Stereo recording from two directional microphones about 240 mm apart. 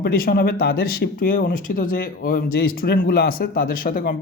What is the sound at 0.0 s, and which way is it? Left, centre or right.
Speech, left.